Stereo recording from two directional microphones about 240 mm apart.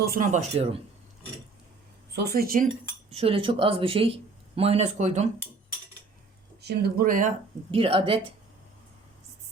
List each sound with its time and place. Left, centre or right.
0.0 s speech: right
2.1 s speech: right
2.8 s speech: right
6.6 s speech: right